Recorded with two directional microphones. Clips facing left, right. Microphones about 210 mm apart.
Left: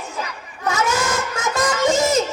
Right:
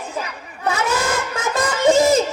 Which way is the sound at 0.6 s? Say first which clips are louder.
Even; 35° right (ahead or behind).